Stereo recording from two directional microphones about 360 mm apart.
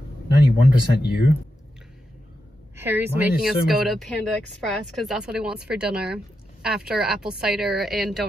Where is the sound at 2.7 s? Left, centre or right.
Centre.